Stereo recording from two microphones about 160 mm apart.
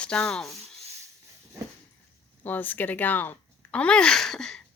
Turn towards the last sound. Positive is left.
turn(degrees=5)  # may be behind; listen again after turning